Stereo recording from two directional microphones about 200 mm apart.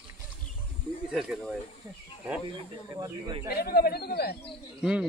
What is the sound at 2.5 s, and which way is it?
Speech, 25° right (ahead or behind).